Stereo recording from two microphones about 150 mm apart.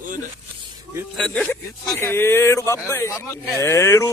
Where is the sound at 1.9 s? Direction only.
15° left (ahead or behind).